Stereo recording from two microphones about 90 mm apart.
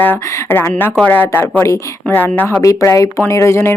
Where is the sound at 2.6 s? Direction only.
35° left (ahead or behind).